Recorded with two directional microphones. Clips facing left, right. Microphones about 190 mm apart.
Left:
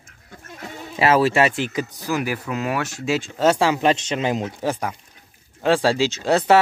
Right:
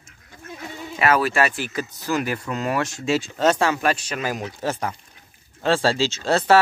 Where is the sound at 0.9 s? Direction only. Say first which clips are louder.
Left 3 dB; 25° left (ahead or behind).